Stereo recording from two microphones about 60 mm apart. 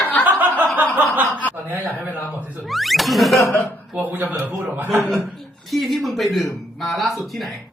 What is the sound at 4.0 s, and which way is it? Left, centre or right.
Speech, right.